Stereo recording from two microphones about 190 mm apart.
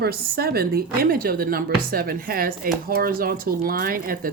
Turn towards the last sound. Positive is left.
turn(degrees=-50)  # may be behind; listen again after turning